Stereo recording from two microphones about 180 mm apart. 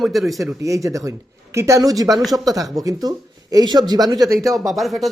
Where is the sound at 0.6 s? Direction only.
15° right (ahead or behind).